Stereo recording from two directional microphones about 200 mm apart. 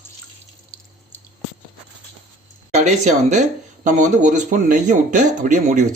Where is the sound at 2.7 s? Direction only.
35° right (ahead or behind).